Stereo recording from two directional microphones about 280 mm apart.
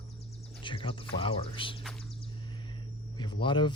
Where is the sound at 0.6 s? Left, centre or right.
Centre.